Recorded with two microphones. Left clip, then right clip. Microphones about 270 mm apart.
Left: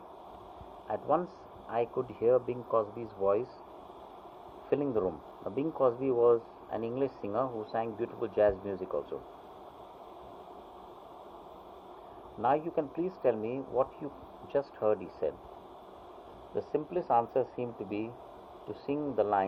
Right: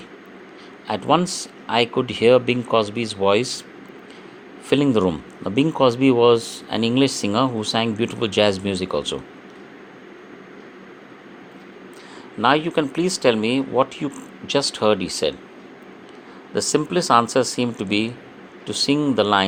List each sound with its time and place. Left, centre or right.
0.9 s speech: right
4.7 s speech: right
12.4 s speech: right
16.6 s speech: right
18.7 s speech: right